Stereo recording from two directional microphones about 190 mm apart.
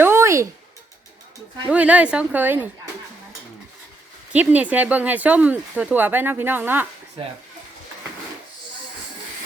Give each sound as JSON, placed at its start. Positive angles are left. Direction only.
{"t": 0.0, "sound": "a sound", "side_deg": -15}
{"t": 1.7, "sound": "speech", "side_deg": -5}
{"t": 4.3, "sound": "speech", "side_deg": -10}